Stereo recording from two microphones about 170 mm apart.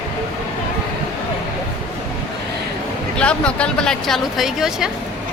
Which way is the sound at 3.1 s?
5° left (ahead or behind).